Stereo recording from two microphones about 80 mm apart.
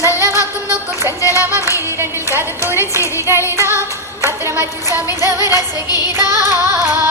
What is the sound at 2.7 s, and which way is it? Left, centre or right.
Speech, left.